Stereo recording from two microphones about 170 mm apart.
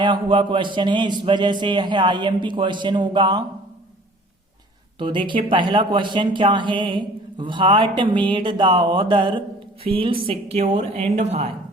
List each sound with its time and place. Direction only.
0.0 s speech: 30° right (ahead or behind)
4.9 s a woman's voice: 30° right (ahead or behind)